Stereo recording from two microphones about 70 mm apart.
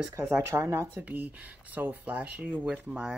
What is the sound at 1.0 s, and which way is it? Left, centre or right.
Speech, right.